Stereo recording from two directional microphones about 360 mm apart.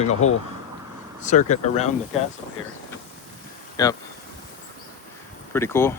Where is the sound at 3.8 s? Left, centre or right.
Centre.